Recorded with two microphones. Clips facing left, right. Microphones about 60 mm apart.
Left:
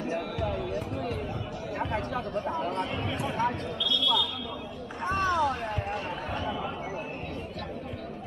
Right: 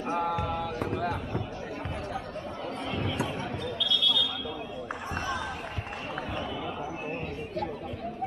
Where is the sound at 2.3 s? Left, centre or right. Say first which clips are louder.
Left 6 dB; left.